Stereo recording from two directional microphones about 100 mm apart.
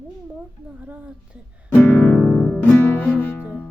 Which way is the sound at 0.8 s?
15° right (ahead or behind).